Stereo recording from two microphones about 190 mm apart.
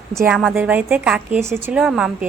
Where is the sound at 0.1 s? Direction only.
15° right (ahead or behind).